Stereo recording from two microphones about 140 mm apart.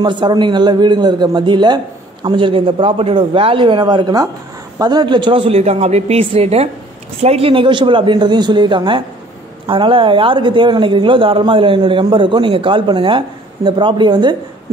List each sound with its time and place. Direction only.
0.0 s speech: 35° right (ahead or behind)